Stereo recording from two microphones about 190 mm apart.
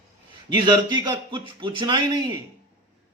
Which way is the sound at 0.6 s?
25° right (ahead or behind).